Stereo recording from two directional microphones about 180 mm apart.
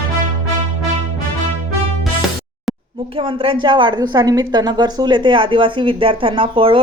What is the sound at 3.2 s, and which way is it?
A woman's voice, 30° right (ahead or behind).